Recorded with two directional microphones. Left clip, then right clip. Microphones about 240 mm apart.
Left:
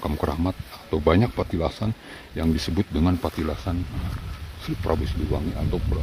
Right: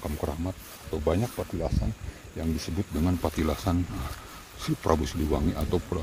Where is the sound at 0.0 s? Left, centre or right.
Centre.